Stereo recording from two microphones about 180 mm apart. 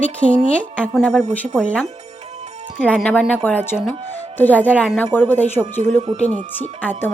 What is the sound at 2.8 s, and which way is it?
A woman's voice, 5° left (ahead or behind).